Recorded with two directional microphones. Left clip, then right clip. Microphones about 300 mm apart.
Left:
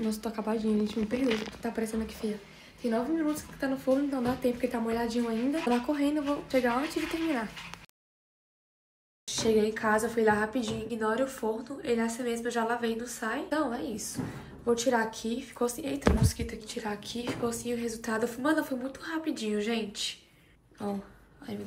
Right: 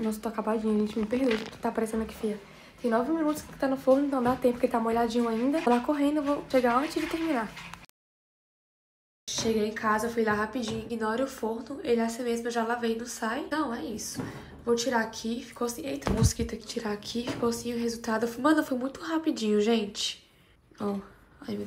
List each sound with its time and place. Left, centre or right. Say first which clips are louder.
0.0 s a woman's voice: right 2 dB; centre
9.2 s a woman's voice: left 2 dB; centre
16.2 s a woman's voice: right 4 dB; centre